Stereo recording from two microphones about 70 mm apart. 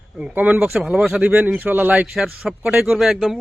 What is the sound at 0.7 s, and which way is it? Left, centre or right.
Speech, centre.